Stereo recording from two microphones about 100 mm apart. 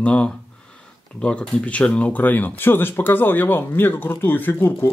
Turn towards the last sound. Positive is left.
turn(degrees=20)  # may be behind; listen again after turning